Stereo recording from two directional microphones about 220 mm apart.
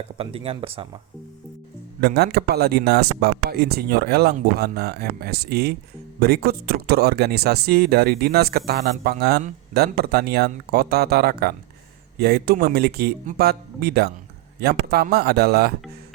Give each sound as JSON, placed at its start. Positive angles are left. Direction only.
{"t": 0.2, "sound": "speech", "side_deg": -25}
{"t": 2.0, "sound": "speech", "side_deg": -45}